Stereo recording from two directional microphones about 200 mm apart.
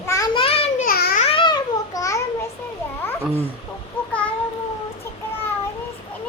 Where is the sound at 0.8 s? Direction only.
45° left (ahead or behind).